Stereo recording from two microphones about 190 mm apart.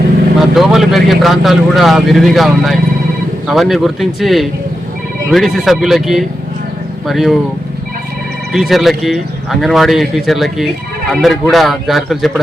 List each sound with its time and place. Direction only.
0.5 s speech: centre (ahead or behind)
8.5 s speech: centre (ahead or behind)